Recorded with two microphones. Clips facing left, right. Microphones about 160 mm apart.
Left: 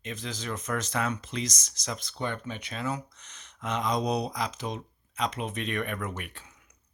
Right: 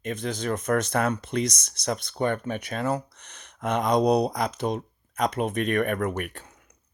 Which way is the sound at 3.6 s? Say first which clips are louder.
Right 7 dB; 60° right (ahead or behind).